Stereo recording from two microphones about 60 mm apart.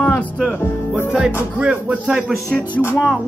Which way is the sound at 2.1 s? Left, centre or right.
Centre.